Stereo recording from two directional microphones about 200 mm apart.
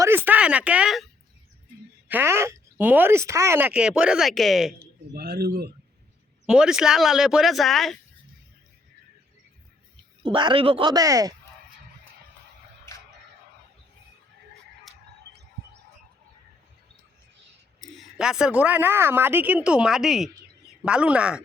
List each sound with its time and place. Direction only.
0.0 s speech: 10° right (ahead or behind)
2.0 s speech: 10° right (ahead or behind)
4.8 s speech: 50° right (ahead or behind)
6.4 s a woman's voice: 5° right (ahead or behind)
10.2 s speech: 25° right (ahead or behind)
14.9 s a sound: centre (ahead or behind)
17.7 s a woman's voice: centre (ahead or behind)